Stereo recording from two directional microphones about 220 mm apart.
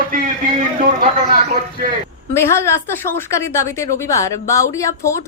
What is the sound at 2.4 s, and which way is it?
A woman's voice, 10° left (ahead or behind).